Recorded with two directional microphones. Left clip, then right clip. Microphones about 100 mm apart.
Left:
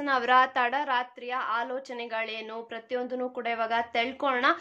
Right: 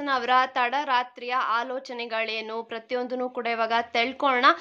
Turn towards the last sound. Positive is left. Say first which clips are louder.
# right 5 dB
turn(degrees=-30)  # may be behind; listen again after turning